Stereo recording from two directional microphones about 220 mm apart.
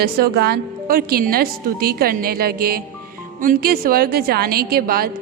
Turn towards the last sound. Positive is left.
turn(degrees=-45)  # may be behind; listen again after turning